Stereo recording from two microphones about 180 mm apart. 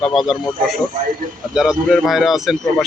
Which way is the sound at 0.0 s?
Centre (ahead or behind).